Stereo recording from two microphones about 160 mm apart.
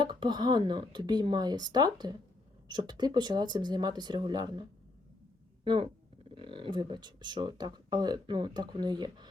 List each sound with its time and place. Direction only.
0.0 s speech: 30° right (ahead or behind)
5.6 s speech: 30° right (ahead or behind)